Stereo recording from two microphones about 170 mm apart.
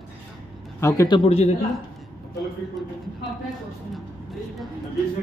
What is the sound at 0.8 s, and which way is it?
Speech, 20° left (ahead or behind).